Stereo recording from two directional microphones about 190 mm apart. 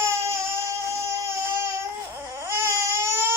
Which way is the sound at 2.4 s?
15° right (ahead or behind).